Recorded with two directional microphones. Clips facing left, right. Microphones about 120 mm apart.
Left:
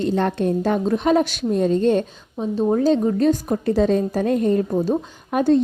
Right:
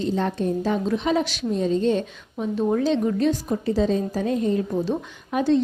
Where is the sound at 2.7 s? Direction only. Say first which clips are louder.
Left 5 dB; 35° left (ahead or behind).